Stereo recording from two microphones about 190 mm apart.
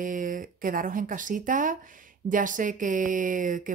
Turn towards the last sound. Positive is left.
turn(degrees=-45)  # may be behind; listen again after turning